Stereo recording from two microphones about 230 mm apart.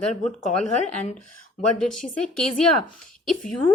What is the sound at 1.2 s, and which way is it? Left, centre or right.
Speech, left.